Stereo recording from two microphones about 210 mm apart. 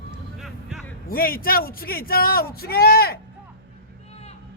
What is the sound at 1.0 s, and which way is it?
Speech, 45° left (ahead or behind).